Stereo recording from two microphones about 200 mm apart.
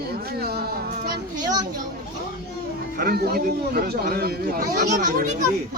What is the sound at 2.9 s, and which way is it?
Speech, 50° right (ahead or behind).